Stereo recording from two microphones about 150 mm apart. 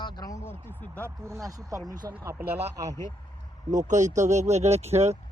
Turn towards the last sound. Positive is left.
turn(degrees=-45)  # may be behind; listen again after turning